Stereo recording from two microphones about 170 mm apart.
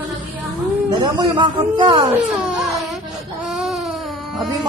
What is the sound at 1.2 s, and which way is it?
Speech, 30° right (ahead or behind).